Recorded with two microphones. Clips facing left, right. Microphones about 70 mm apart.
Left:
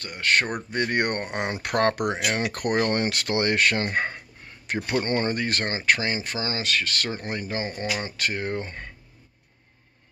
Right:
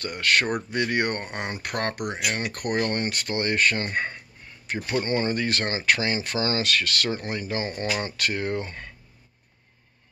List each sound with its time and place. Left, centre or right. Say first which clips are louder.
0.0 s speech: even; left
1.0 s speech: left 2 dB; left
5.0 s speech: even; left; by 8.1 s centre
8.2 s speech: right 1 dB; left